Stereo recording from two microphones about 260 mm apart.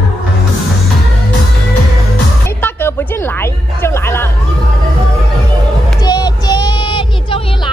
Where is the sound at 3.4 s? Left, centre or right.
Centre.